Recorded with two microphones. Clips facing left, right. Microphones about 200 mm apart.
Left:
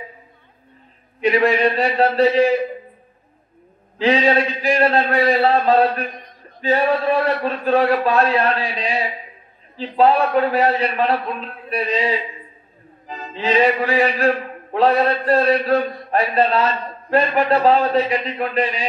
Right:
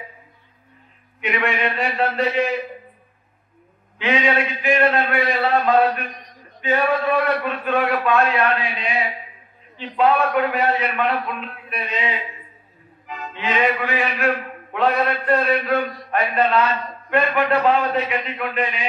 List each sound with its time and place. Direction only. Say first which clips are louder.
1.2 s a man's voice: left 7 dB; 35° left (ahead or behind)
4.0 s a man's voice: left 4 dB; 35° left (ahead or behind)